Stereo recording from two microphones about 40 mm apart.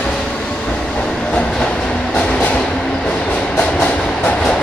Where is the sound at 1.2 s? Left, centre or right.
Centre.